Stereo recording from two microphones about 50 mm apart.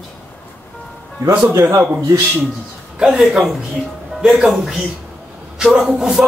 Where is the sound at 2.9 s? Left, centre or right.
Centre.